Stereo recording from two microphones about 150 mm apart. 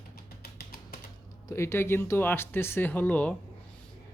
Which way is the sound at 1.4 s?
20° left (ahead or behind).